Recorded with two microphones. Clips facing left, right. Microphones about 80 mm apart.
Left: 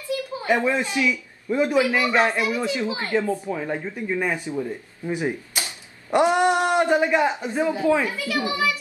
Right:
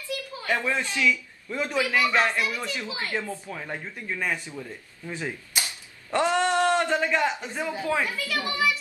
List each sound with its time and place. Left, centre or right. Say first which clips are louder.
0.1 s a woman's voice: left 6 dB; left
3.2 s speech: left 9 dB; centre